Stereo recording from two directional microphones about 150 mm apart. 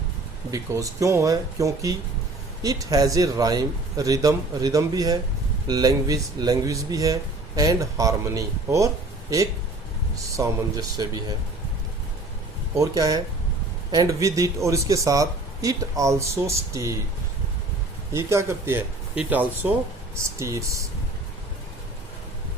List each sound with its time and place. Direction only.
0.5 s speech: 20° right (ahead or behind)
10.3 s speech: 25° right (ahead or behind)
12.7 s speech: 25° right (ahead or behind)
18.1 s speech: 20° right (ahead or behind)